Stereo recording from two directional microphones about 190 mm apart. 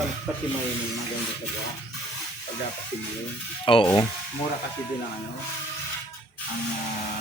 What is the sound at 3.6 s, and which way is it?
Speech, 30° left (ahead or behind).